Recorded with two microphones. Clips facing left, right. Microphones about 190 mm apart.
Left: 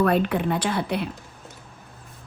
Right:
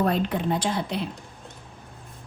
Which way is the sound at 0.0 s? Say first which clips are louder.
Left 3 dB; 65° left (ahead or behind).